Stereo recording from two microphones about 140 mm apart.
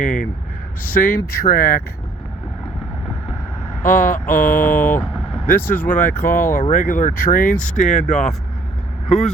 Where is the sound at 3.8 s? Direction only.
75° left (ahead or behind).